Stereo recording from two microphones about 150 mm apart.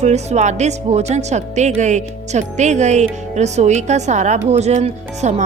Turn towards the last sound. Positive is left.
turn(degrees=-50)  # may be behind; listen again after turning